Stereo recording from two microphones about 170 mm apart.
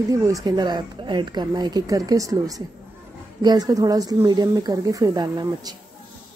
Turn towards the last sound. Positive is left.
turn(degrees=-20)  # may be behind; listen again after turning